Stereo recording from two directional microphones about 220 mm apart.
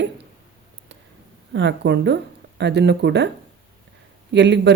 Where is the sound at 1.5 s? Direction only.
50° right (ahead or behind).